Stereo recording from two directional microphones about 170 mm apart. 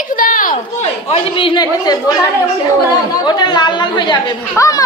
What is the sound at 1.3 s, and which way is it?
Speech, 25° left (ahead or behind).